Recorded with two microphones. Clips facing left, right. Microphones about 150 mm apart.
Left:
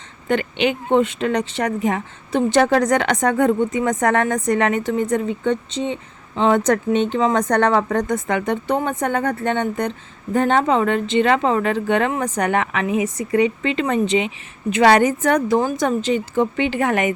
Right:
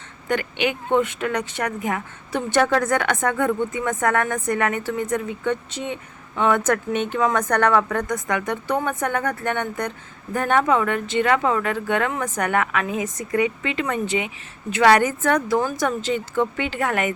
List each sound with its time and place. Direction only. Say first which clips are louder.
0.3 s a woman's voice: left 4 dB; 25° left (ahead or behind)